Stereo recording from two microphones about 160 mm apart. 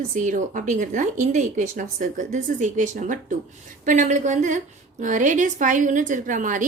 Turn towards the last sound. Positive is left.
turn(degrees=-55)  # may be behind; listen again after turning